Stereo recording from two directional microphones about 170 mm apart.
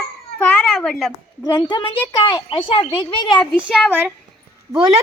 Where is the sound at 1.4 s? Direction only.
25° left (ahead or behind).